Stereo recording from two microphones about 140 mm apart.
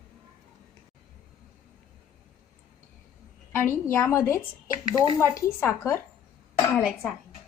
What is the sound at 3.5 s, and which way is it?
A woman's voice, 20° left (ahead or behind).